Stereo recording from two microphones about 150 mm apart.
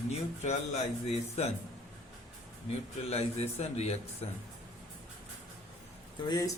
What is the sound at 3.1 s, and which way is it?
Speech, 45° left (ahead or behind).